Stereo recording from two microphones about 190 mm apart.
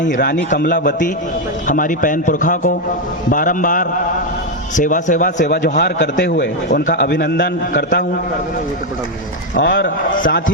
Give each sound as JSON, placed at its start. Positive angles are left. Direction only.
{"t": 0.6, "sound": "a man's voice", "side_deg": 45}
{"t": 5.5, "sound": "a man's voice", "side_deg": 60}
{"t": 9.6, "sound": "a man's voice", "side_deg": 70}
{"t": 9.8, "sound": "a man's voice", "side_deg": 45}